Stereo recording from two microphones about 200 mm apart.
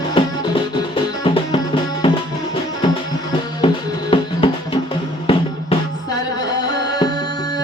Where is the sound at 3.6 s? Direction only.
25° left (ahead or behind).